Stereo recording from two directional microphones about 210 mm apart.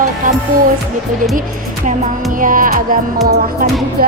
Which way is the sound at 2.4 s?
40° right (ahead or behind).